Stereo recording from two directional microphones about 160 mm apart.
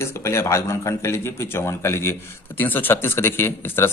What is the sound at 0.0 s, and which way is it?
Speech, 15° left (ahead or behind).